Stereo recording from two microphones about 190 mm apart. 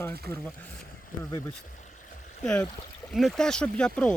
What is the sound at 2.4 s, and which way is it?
Speech, 5° left (ahead or behind).